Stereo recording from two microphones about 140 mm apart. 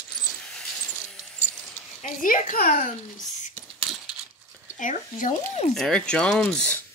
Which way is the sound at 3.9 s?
Centre (ahead or behind).